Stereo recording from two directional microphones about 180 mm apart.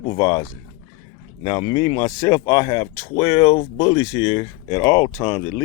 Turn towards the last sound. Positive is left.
turn(degrees=20)  # may be behind; listen again after turning